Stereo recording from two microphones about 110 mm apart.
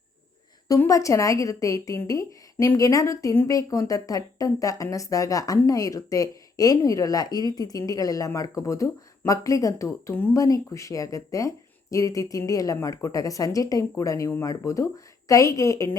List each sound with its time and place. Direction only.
0.9 s a woman's voice: 30° left (ahead or behind)
10.3 s a woman's voice: 30° left (ahead or behind)